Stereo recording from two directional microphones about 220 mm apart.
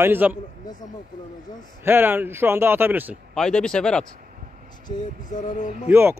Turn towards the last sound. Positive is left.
turn(degrees=-10)  # may be behind; listen again after turning